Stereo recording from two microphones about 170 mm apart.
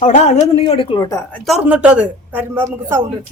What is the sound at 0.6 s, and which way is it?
Speech, 30° left (ahead or behind).